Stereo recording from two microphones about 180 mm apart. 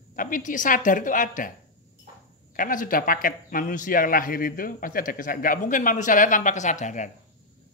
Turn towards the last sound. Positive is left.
turn(degrees=45)  # may be behind; listen again after turning